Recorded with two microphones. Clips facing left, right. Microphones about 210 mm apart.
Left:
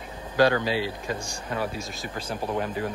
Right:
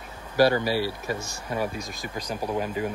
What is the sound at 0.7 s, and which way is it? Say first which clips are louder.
Speech: right 1 dB; 15° left (ahead or behind).